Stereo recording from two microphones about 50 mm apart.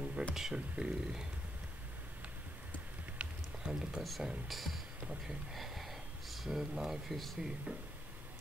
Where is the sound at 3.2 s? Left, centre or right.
Centre.